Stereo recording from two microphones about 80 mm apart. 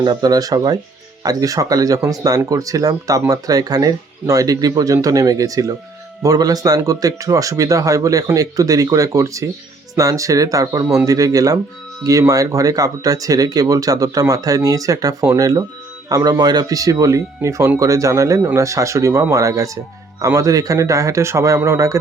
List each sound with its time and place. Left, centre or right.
0.0 s speech: right